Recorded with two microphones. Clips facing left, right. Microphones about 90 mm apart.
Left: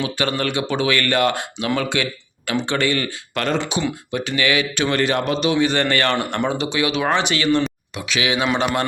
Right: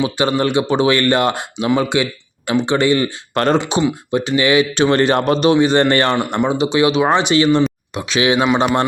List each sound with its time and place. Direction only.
0.0 s speech: 20° right (ahead or behind)
3.3 s speech: 35° right (ahead or behind)
4.1 s speech: 25° right (ahead or behind)
5.6 s speech: 25° right (ahead or behind)
6.1 s speech: 15° right (ahead or behind)